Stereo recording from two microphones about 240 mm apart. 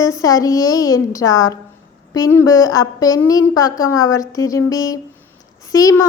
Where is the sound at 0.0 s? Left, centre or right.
Centre.